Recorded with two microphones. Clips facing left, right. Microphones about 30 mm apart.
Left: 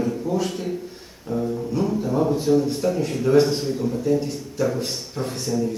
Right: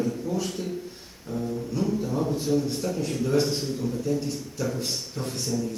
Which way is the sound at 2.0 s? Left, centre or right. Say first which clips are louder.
Left 6 dB; centre.